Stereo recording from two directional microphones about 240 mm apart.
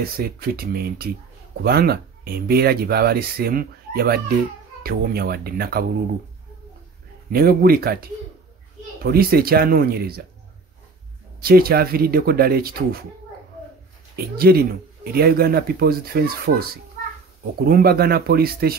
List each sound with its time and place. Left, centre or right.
0.0 s speech: right
7.3 s speech: right
11.4 s speech: right
14.1 s speech: right